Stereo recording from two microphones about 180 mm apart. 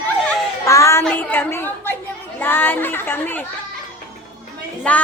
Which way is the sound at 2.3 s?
10° left (ahead or behind).